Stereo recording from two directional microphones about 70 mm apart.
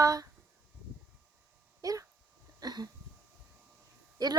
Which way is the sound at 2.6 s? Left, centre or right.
Right.